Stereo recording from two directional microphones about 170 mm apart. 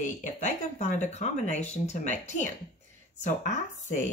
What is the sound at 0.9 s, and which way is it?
Speech, 45° left (ahead or behind).